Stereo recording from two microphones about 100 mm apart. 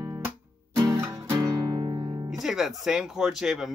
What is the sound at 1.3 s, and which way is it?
Music, 40° right (ahead or behind).